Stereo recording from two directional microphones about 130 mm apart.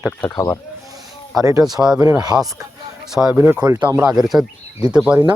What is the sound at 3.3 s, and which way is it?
Speech, 15° right (ahead or behind).